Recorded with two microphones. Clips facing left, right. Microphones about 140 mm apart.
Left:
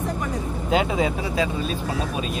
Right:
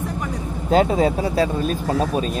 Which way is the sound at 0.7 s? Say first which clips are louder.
Right 5 dB; 40° right (ahead or behind).